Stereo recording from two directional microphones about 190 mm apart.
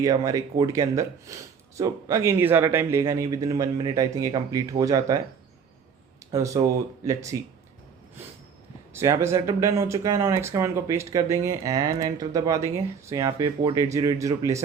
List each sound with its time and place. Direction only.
0.0 s speech: 20° right (ahead or behind)
6.3 s speech: 15° right (ahead or behind)
8.9 s speech: 15° right (ahead or behind)